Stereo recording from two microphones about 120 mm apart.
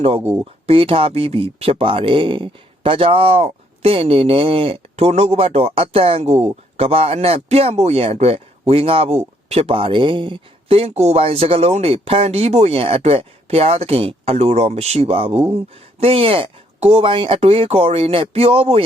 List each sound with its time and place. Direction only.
0.3 s speech: 50° right (ahead or behind)